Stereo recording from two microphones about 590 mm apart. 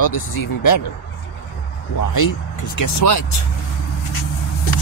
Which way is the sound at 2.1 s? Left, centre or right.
Left.